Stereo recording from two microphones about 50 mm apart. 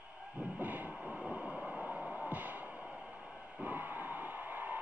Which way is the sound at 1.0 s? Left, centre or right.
Right.